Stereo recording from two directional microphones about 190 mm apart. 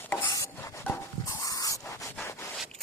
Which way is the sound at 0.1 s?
15° left (ahead or behind).